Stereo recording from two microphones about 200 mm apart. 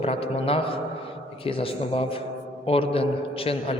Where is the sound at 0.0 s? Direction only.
30° left (ahead or behind).